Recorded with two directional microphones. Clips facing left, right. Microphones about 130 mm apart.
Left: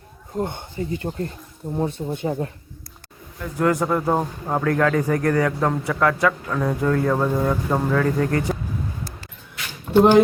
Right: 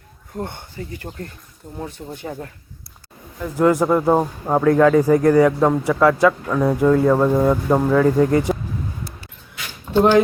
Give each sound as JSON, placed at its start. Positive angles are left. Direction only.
{"t": 0.3, "sound": "speech", "side_deg": 20}
{"t": 3.6, "sound": "speech", "side_deg": -20}
{"t": 4.6, "sound": "a man's voice", "side_deg": -15}